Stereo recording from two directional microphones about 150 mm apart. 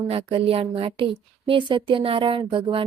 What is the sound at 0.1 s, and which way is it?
A woman's voice, 40° right (ahead or behind).